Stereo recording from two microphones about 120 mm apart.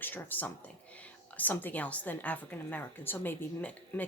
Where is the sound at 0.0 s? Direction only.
15° left (ahead or behind).